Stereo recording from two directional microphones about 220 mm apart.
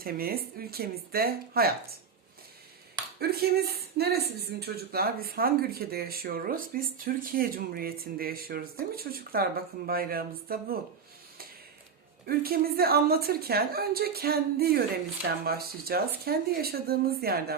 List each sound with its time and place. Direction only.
0.0 s speech: 40° right (ahead or behind)
3.2 s speech: 45° right (ahead or behind)
12.2 s speech: 45° right (ahead or behind)